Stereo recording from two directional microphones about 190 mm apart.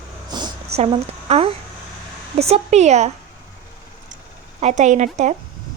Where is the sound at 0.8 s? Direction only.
35° right (ahead or behind).